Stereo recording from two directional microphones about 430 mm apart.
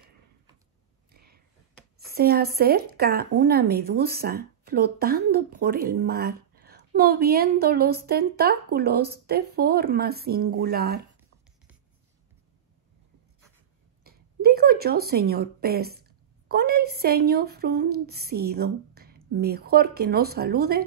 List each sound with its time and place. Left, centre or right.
1.1 s a sound: right
2.1 s a woman's voice: right
14.0 s speech: right